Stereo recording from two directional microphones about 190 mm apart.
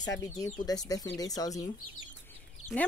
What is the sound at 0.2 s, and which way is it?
Speech, 20° left (ahead or behind).